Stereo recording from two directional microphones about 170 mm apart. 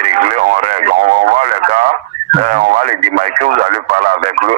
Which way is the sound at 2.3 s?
50° right (ahead or behind).